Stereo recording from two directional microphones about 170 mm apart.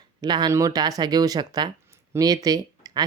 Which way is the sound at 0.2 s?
25° right (ahead or behind).